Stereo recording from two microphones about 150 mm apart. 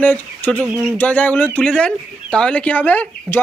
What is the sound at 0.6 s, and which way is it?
Speech, 10° right (ahead or behind).